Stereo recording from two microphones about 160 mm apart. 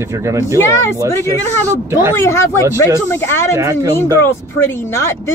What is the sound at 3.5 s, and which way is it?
Speech, 20° right (ahead or behind).